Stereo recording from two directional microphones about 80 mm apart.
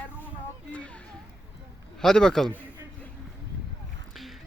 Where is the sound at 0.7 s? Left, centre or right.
Centre.